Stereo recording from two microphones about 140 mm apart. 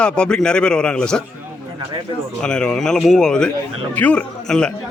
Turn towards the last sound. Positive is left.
turn(degrees=5)  # may be behind; listen again after turning